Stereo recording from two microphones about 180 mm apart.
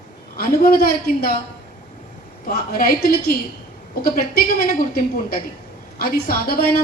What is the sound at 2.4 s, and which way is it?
A woman's voice, 55° left (ahead or behind).